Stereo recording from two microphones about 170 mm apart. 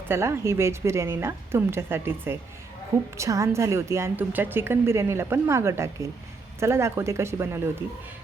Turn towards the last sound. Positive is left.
turn(degrees=-15)  # may be behind; listen again after turning